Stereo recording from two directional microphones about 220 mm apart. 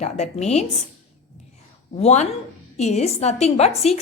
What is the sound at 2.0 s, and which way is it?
A woman's voice, 30° left (ahead or behind).